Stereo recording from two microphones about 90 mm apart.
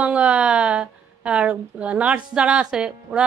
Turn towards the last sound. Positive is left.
turn(degrees=-10)  # may be behind; listen again after turning